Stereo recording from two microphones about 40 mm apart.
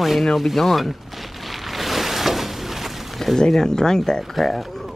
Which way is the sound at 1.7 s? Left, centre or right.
Centre.